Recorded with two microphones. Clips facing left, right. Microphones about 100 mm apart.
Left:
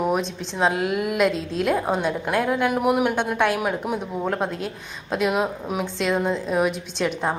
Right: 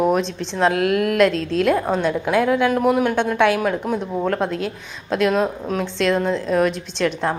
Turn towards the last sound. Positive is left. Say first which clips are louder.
# right 3 dB
turn(degrees=5)  # may be behind; listen again after turning